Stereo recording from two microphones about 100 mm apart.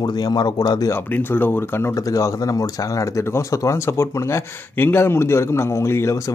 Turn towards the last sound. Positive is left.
turn(degrees=25)  # may be behind; listen again after turning